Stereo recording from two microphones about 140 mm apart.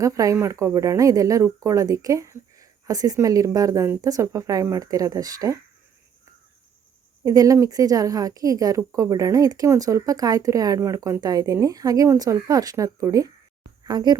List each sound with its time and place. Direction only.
0.0 s speech: 25° right (ahead or behind)
7.3 s speech: 25° right (ahead or behind)